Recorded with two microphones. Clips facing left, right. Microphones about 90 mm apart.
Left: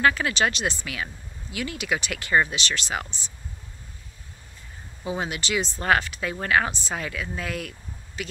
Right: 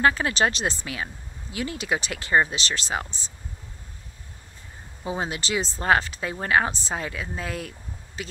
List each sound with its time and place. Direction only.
0.0 s speech: 30° right (ahead or behind)
5.0 s speech: 30° right (ahead or behind)